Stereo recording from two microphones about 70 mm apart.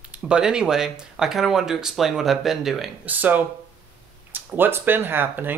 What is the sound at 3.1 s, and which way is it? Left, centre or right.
Speech, right.